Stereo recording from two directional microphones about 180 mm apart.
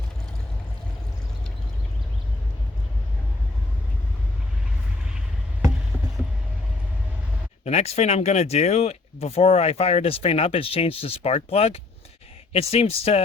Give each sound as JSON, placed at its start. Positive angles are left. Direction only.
{"t": 7.6, "sound": "speech", "side_deg": 35}